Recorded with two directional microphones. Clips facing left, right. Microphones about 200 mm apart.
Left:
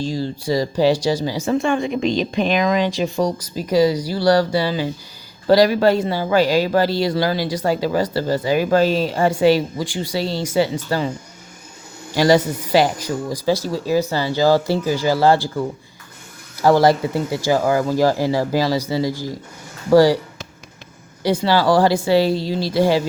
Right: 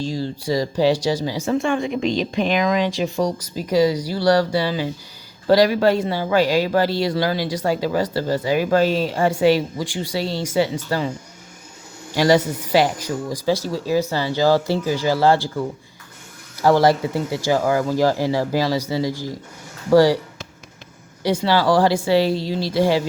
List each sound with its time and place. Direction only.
0.0 s speech: 35° left (ahead or behind)
12.1 s speech: 35° left (ahead or behind)
16.6 s speech: 40° left (ahead or behind)
21.2 s speech: 35° left (ahead or behind)